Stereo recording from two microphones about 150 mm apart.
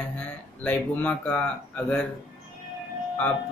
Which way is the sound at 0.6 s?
10° left (ahead or behind).